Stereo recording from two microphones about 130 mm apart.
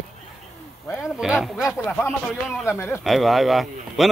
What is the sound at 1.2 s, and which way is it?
Speech, 5° right (ahead or behind).